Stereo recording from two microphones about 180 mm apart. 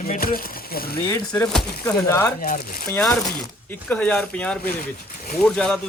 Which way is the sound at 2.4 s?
55° left (ahead or behind).